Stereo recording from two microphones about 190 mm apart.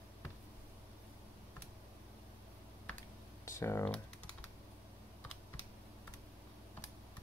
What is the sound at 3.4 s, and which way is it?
Speech, 15° left (ahead or behind).